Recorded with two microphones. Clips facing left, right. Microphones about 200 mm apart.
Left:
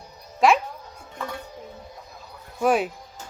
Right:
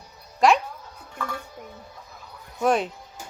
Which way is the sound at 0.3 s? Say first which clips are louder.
Even; centre (ahead or behind).